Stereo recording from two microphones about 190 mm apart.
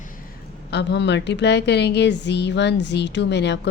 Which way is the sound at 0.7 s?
65° left (ahead or behind).